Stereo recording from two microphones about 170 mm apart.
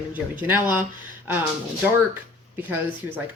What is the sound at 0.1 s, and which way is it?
Speech, 10° right (ahead or behind).